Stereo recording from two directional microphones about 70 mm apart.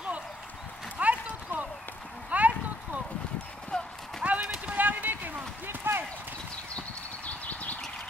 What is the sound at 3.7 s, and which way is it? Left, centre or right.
Clip-clop, centre.